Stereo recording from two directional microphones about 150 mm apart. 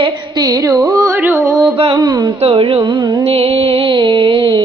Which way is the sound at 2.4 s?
35° right (ahead or behind).